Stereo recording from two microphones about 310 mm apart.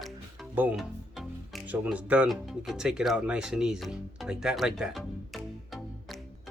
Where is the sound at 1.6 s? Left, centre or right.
Centre.